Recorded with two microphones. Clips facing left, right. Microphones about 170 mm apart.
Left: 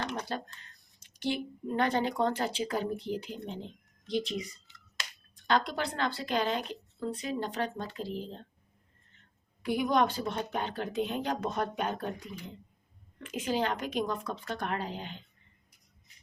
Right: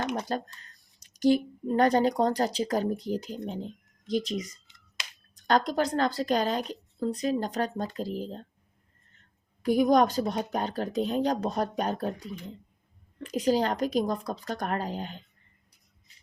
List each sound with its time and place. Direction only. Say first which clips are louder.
0.0 s a sound: right 5 dB; 20° right (ahead or behind)
0.3 s a woman's voice: right 5 dB; 40° right (ahead or behind)
9.6 s a woman's voice: right 6 dB; 40° right (ahead or behind)